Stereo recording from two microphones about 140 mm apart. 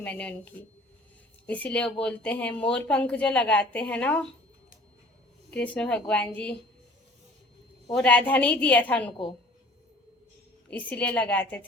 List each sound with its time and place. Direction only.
0.0 s a woman's voice: 10° left (ahead or behind)
1.5 s a woman's voice: 10° left (ahead or behind)
5.7 s a woman's voice: 10° left (ahead or behind)
7.9 s a woman's voice: 5° left (ahead or behind)
10.7 s a woman's voice: 10° left (ahead or behind)